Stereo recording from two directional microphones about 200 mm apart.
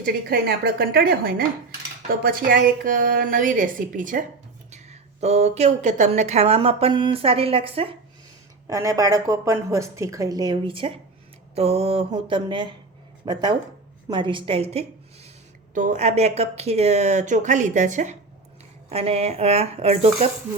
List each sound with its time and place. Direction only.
0.0 s a woman's voice: 50° right (ahead or behind); by 7.9 s 30° right (ahead or behind)
8.6 s a woman's voice: 15° right (ahead or behind); by 20.2 s 30° right (ahead or behind)